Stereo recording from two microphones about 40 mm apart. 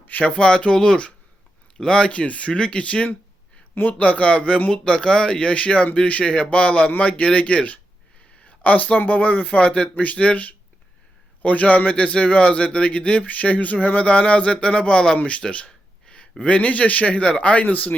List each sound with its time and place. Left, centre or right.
0.2 s speech: left; by 15.2 s centre
15.2 s a sound: left
16.4 s speech: left